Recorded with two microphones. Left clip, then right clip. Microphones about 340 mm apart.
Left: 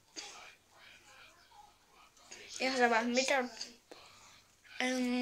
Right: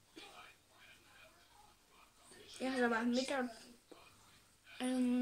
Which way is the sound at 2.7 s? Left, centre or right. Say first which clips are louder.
Left 6 dB; left.